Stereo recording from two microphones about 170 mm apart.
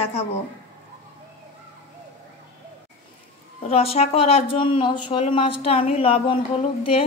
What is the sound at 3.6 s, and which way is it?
A woman's voice, 35° left (ahead or behind).